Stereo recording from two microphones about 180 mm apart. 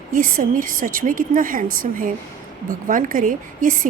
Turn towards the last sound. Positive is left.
turn(degrees=-45)  # may be behind; listen again after turning